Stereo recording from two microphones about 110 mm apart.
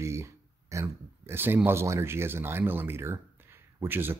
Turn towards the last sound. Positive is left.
turn(degrees=-20)  # may be behind; listen again after turning